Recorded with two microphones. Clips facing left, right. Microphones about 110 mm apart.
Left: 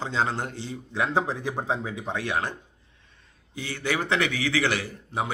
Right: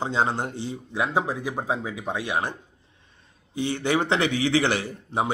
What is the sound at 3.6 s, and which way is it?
A man's voice, 25° right (ahead or behind).